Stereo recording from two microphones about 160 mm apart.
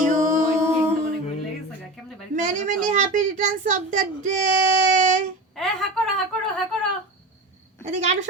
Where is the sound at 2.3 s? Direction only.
50° right (ahead or behind).